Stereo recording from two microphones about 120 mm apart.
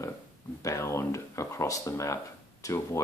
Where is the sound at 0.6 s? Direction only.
25° left (ahead or behind).